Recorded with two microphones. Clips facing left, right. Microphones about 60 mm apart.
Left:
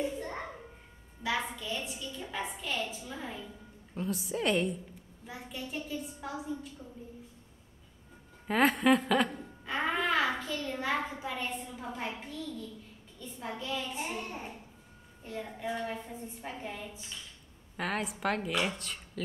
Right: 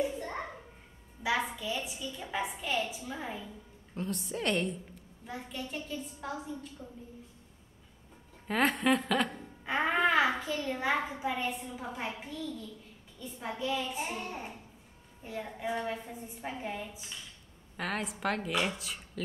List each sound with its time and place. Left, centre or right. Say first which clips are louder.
0.0 s a sound: right 1 dB; right
1.2 s a woman's voice: right 2 dB; centre
3.9 s a woman's voice: left 2 dB; centre
8.5 s a woman's voice: left 2 dB; centre
9.7 s music: right 3 dB; right
10.4 s a woman's voice: right 2 dB; centre
13.6 s a woman's voice: right 4 dB; centre
17.7 s a woman's voice: left 1 dB; centre